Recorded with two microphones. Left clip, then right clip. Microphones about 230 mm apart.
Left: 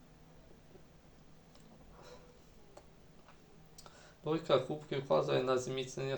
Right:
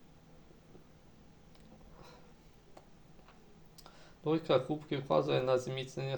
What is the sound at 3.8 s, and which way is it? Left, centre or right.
Speech, right.